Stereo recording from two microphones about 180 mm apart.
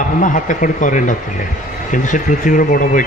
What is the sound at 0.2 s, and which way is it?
A man's voice, 45° left (ahead or behind).